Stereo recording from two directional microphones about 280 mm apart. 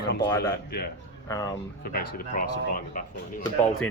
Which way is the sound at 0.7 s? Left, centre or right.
Left.